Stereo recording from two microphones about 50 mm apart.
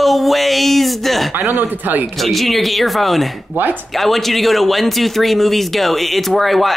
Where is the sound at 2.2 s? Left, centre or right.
Centre.